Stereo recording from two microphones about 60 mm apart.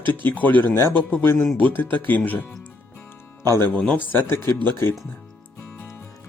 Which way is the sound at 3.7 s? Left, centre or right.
Centre.